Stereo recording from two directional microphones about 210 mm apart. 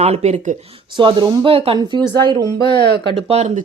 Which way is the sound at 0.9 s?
25° right (ahead or behind).